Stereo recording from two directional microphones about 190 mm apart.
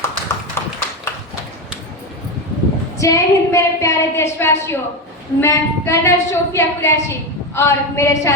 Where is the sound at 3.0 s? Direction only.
15° left (ahead or behind).